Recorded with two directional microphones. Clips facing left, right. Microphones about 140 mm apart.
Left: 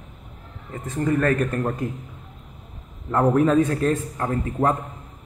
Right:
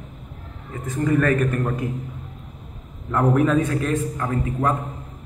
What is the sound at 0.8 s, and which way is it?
Speech, 35° left (ahead or behind).